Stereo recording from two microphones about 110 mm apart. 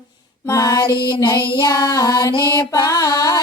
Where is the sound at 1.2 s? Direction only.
35° left (ahead or behind).